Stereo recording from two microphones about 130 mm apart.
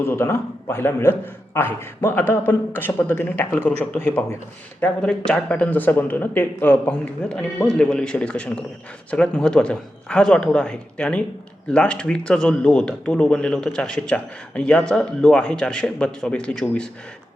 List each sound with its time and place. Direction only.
0.0 s a man's voice: 20° left (ahead or behind)